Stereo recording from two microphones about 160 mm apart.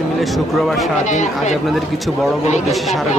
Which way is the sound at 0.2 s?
Centre (ahead or behind).